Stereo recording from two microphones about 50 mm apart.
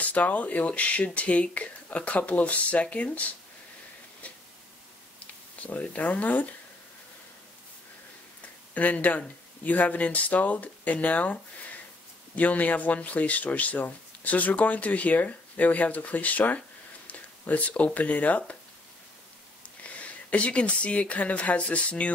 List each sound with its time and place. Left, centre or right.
0.0 s speech: left
5.2 s speech: left
8.7 s speech: left
12.4 s speech: left
20.0 s speech: left